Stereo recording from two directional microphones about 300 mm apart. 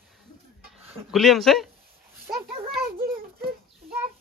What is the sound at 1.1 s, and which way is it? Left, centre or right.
Speech, centre.